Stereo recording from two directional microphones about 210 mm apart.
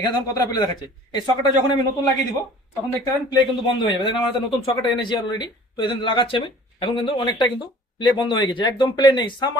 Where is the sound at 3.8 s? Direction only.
20° left (ahead or behind).